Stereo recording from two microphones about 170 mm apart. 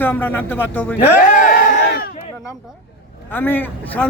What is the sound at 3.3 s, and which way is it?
Speech, 10° left (ahead or behind).